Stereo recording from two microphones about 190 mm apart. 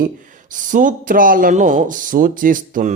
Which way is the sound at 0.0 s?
45° right (ahead or behind).